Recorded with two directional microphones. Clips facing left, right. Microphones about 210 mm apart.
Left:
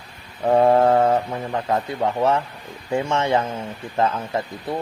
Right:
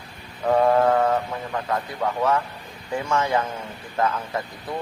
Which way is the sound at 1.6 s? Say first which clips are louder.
Left 4 dB; 25° left (ahead or behind).